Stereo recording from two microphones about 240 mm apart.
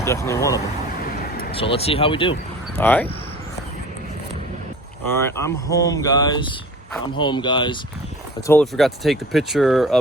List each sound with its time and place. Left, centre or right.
0.0 s speech: centre
1.0 s vehicle: left
1.5 s speech: left
2.7 s speech: centre
5.0 s speech: centre
8.4 s speech: centre